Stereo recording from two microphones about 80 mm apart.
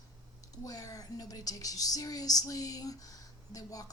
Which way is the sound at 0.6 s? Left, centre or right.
Left.